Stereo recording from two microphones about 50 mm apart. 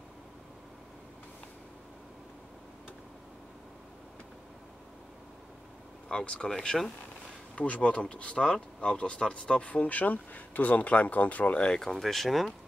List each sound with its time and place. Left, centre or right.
6.0 s speech: centre
7.5 s speech: left
11.6 s speech: centre